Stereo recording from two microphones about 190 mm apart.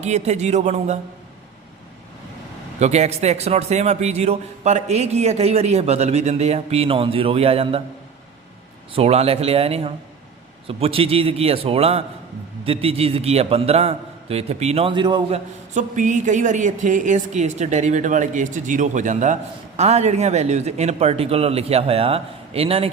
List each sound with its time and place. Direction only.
0.0 s a woman's voice: 35° right (ahead or behind)
2.7 s a woman's voice: 35° right (ahead or behind)
8.9 s a woman's voice: 30° right (ahead or behind)
15.7 s a woman's voice: 40° right (ahead or behind)